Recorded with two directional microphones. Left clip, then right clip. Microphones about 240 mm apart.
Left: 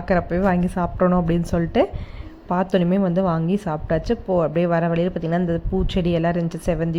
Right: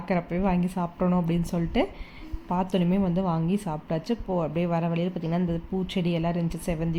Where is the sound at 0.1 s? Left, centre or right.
Centre.